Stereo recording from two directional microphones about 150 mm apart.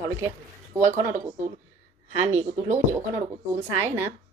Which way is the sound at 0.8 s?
20° right (ahead or behind).